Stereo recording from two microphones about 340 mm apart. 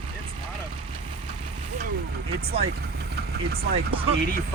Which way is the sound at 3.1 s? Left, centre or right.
Right.